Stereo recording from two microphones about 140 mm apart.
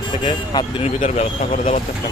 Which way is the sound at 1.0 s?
50° left (ahead or behind).